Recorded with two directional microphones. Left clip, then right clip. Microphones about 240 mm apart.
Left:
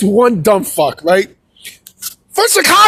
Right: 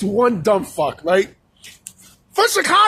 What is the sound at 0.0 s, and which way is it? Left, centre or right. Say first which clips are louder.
A man's voice: left 6 dB; left.